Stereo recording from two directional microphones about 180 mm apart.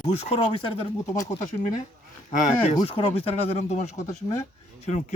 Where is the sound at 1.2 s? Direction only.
45° left (ahead or behind).